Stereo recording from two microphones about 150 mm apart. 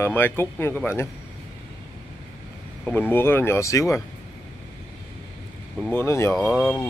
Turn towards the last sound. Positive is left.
turn(degrees=5)  # may be behind; listen again after turning